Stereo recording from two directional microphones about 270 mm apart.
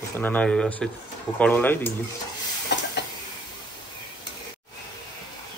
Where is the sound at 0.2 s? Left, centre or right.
Centre.